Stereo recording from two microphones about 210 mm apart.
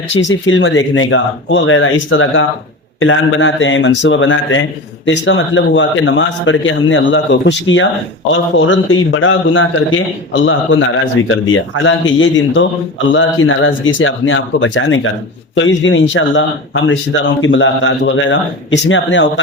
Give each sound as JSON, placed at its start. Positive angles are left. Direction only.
{"t": 0.1, "sound": "a man's voice", "side_deg": 60}